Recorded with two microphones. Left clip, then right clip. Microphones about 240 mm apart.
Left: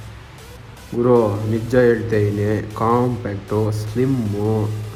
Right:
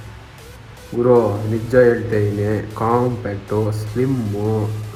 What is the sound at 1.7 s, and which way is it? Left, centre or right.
Speech, left.